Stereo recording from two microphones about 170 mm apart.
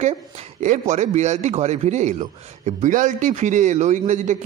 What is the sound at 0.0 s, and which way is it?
A man's voice, 45° right (ahead or behind).